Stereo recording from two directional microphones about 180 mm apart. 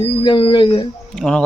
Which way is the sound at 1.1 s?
5° left (ahead or behind).